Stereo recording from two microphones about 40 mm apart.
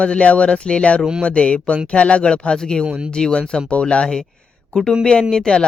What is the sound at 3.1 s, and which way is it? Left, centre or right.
Speech, left.